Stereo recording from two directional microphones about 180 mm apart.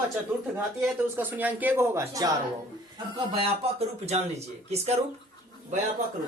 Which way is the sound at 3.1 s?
30° right (ahead or behind).